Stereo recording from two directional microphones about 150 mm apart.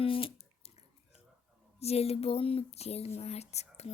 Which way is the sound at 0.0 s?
40° left (ahead or behind).